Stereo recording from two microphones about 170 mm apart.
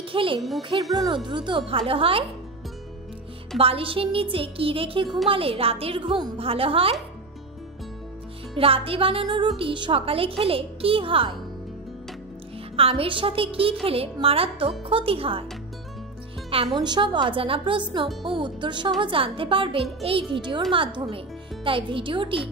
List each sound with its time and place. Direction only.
0.1 s a child's voice: 30° right (ahead or behind)
0.4 s speech: centre (ahead or behind)
1.0 s a woman's voice: 25° right (ahead or behind)
3.5 s a woman's voice: 35° right (ahead or behind)
8.5 s a woman's voice: 35° right (ahead or behind)
12.7 s a woman's voice: 35° right (ahead or behind)
16.4 s a woman's voice: 35° right (ahead or behind)